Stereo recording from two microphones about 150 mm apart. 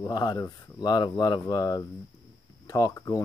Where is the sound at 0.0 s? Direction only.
25° left (ahead or behind).